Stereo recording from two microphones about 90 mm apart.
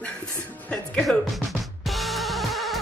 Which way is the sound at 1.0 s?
Centre (ahead or behind).